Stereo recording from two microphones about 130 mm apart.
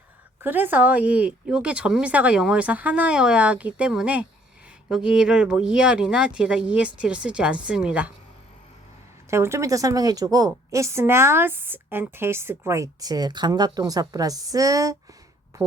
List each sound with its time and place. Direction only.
0.4 s speech: 15° right (ahead or behind)
9.3 s a woman's voice: 20° right (ahead or behind)
15.5 s a sound: 25° right (ahead or behind)